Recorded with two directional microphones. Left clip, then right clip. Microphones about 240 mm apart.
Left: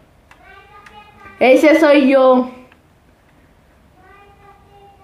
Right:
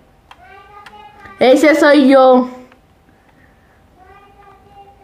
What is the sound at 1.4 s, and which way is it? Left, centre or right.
A woman's voice, right.